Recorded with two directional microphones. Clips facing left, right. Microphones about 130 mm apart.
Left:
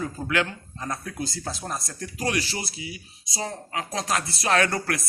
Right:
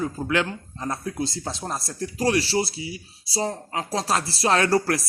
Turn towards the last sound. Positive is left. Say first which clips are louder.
# right 3 dB
turn(degrees=-30)  # may be behind; listen again after turning